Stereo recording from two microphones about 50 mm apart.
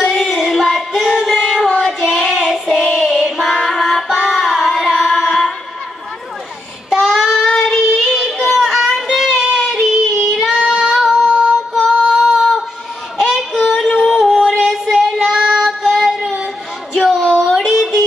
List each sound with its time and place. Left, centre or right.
0.0 s child singing: centre
1.0 s child singing: centre
3.7 s singing: centre
6.9 s child singing: centre
7.8 s music: centre
9.4 s music: centre
9.7 s child singing: centre
10.7 s female singing: centre
11.2 s female singing: centre
11.9 s female singing: centre
13.2 s child singing: centre
17.4 s music: centre